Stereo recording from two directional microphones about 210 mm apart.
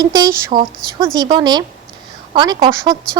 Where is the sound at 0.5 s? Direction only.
30° right (ahead or behind).